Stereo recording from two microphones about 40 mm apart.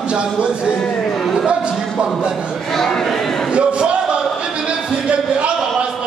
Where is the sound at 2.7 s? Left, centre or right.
Centre.